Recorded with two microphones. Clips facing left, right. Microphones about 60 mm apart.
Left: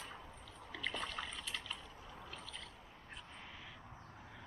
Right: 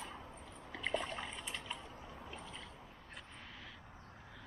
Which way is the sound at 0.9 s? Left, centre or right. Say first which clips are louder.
Right 3 dB; right.